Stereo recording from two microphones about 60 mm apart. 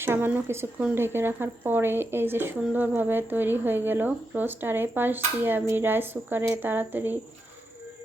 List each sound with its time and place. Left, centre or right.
0.0 s speech: right